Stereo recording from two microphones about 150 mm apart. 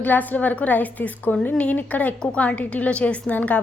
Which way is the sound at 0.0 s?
10° left (ahead or behind).